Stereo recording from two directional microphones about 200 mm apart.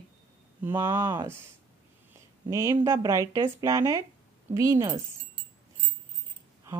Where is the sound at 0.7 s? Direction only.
10° right (ahead or behind).